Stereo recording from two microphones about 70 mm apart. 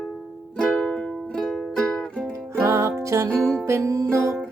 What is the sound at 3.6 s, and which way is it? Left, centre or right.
Music, right.